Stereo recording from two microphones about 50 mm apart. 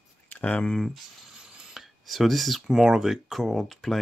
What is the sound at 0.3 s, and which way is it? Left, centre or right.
Speech, left.